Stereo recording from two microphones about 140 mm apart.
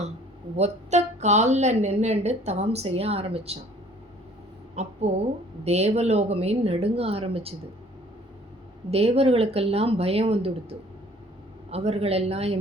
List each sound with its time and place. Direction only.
0.5 s speech: 50° right (ahead or behind)
4.7 s a woman's voice: 50° right (ahead or behind)
8.9 s speech: 45° right (ahead or behind)